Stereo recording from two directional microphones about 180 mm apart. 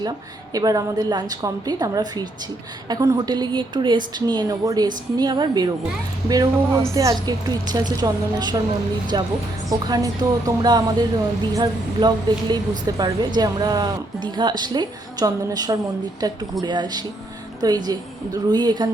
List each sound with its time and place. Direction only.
0.5 s speech: 20° right (ahead or behind)